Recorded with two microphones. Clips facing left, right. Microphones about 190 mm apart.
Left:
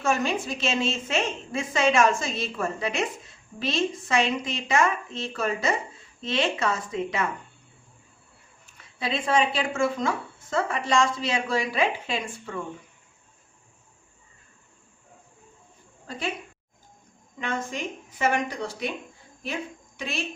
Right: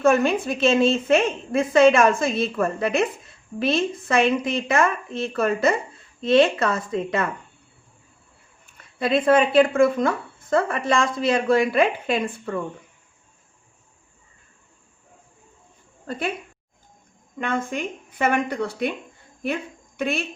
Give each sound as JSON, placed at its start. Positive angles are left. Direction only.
{"t": 0.0, "sound": "a woman's voice", "side_deg": -55}
{"t": 8.8, "sound": "a woman's voice", "side_deg": -55}
{"t": 16.0, "sound": "a woman's voice", "side_deg": -55}
{"t": 17.3, "sound": "a woman's voice", "side_deg": -55}
{"t": 20.0, "sound": "a woman's voice", "side_deg": -55}